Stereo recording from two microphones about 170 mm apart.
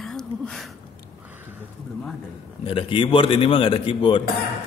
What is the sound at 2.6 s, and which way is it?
A man's voice, 30° left (ahead or behind).